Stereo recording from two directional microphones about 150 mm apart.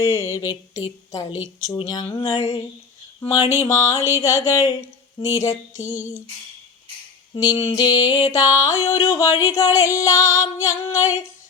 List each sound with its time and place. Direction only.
0.0 s female singing: 20° left (ahead or behind)
1.8 s a sound: 30° left (ahead or behind)
3.6 s female singing: 20° left (ahead or behind)
7.3 s female singing: 25° left (ahead or behind)